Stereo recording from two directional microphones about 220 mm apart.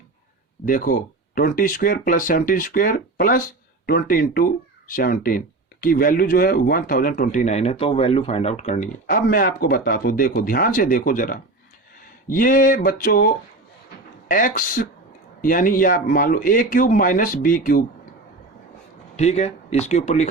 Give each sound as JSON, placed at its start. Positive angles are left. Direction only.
{"t": 0.6, "sound": "speech", "side_deg": 40}
{"t": 19.1, "sound": "speech", "side_deg": 30}